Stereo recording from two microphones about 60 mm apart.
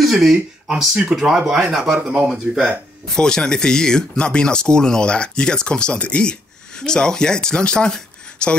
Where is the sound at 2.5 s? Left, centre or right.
Centre.